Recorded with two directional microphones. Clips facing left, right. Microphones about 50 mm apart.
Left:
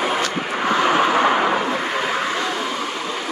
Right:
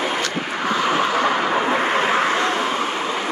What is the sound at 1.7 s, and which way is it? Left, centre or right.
Vehicle, right.